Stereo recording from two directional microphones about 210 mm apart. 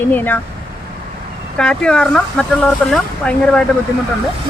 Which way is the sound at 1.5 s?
5° left (ahead or behind).